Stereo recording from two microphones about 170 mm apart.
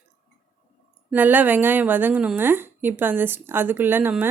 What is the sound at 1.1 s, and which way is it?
A woman's voice, 10° right (ahead or behind).